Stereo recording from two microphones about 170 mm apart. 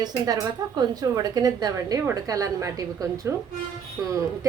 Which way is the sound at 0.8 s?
20° right (ahead or behind).